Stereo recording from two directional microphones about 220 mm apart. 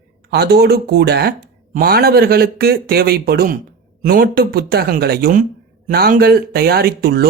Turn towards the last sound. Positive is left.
turn(degrees=-45)  # may be behind; listen again after turning